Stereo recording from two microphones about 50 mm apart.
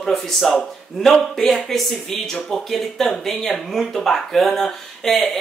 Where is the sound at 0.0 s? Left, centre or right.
Centre.